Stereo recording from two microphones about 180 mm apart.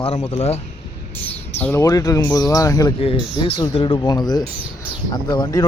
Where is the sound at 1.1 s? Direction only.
10° left (ahead or behind).